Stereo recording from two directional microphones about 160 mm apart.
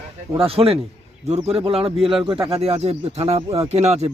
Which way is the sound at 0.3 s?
35° right (ahead or behind).